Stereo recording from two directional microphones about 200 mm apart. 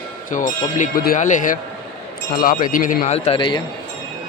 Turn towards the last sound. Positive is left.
turn(degrees=25)  # may be behind; listen again after turning